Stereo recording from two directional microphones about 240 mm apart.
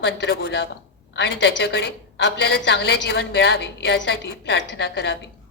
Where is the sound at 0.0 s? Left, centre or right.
Left.